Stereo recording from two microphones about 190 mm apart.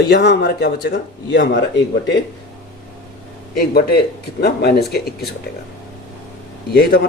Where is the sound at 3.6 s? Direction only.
55° left (ahead or behind).